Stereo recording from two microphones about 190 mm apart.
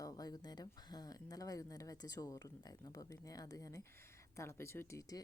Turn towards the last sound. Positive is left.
turn(degrees=15)  # may be behind; listen again after turning